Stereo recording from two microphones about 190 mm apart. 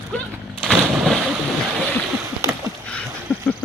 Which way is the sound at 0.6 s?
Centre (ahead or behind).